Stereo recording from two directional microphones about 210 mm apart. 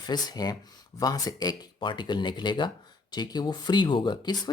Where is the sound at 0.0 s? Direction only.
20° left (ahead or behind).